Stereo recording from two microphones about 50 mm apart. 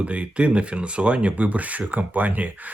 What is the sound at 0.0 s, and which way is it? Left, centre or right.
Speech, right.